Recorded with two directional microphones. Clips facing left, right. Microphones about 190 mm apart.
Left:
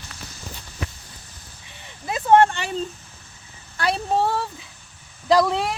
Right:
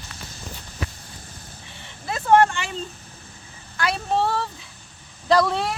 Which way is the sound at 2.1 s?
20° left (ahead or behind).